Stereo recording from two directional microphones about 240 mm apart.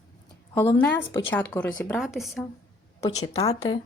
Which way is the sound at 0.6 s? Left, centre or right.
Centre.